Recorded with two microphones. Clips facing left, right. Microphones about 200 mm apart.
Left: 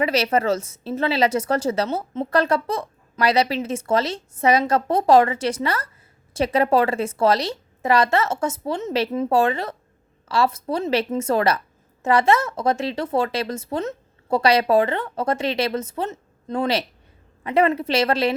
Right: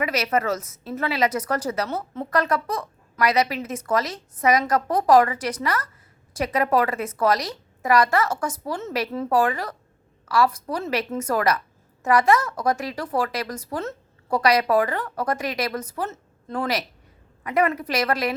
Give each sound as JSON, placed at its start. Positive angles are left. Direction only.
{"t": 0.0, "sound": "a woman's voice", "side_deg": 30}